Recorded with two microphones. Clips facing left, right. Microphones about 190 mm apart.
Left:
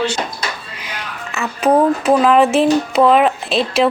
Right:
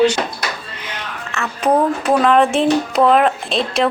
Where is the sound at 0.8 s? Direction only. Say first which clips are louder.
Even; 10° left (ahead or behind).